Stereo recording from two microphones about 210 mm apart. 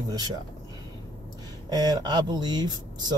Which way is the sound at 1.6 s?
20° right (ahead or behind).